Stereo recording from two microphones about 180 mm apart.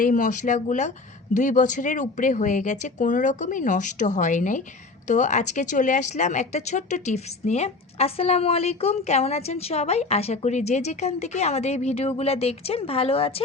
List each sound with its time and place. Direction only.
0.0 s a woman's voice: 45° left (ahead or behind)